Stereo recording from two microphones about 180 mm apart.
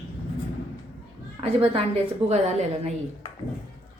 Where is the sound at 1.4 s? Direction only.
35° right (ahead or behind).